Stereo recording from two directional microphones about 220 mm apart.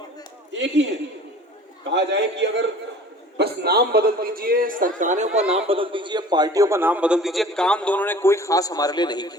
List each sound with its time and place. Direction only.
0.5 s a man's voice: 55° right (ahead or behind)
1.9 s a man's voice: 55° right (ahead or behind); by 9.3 s 20° left (ahead or behind)